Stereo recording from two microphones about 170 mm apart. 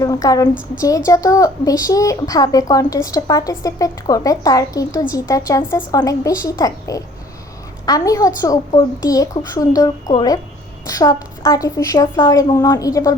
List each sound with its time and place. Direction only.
0.0 s speech: 20° left (ahead or behind)